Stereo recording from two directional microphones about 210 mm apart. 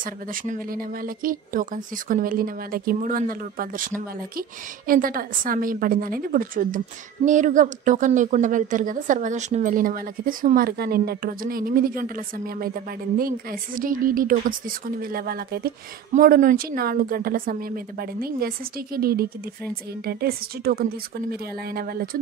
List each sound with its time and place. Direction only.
0.0 s speech: 40° right (ahead or behind)